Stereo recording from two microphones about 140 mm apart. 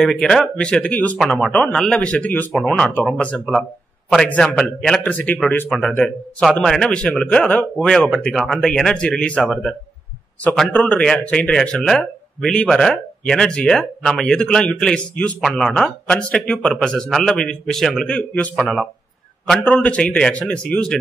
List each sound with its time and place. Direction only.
0.0 s a man's voice: 5° left (ahead or behind)
5.7 s a man's voice: centre (ahead or behind)